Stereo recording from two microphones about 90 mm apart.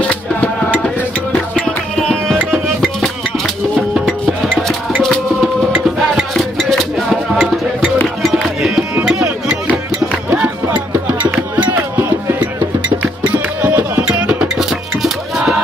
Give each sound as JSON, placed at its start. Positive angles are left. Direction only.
{"t": 0.1, "sound": "music", "side_deg": 15}
{"t": 6.1, "sound": "music", "side_deg": 0}
{"t": 13.6, "sound": "music", "side_deg": -20}